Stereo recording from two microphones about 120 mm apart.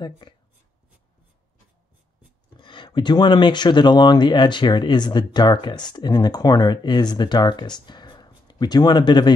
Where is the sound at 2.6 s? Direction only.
40° left (ahead or behind).